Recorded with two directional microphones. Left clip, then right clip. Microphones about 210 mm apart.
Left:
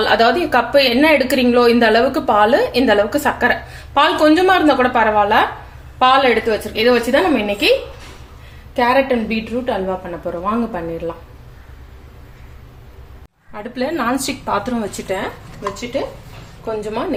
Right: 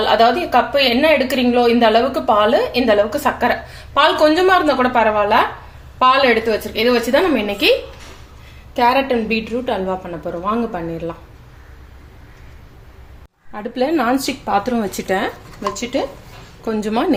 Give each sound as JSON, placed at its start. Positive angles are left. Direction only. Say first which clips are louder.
{"t": 0.0, "sound": "a woman's voice", "louder": "even", "side_deg": 5}
{"t": 13.5, "sound": "speech", "louder": "right 3 dB", "side_deg": -35}
{"t": 16.6, "sound": "a woman's voice", "louder": "right 3 dB", "side_deg": -50}